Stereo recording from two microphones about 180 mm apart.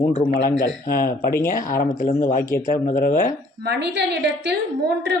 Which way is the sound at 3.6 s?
65° right (ahead or behind).